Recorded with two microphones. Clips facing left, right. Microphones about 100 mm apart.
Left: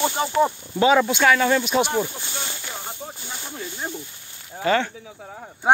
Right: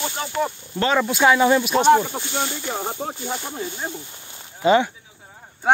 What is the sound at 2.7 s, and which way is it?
Speech, 90° right.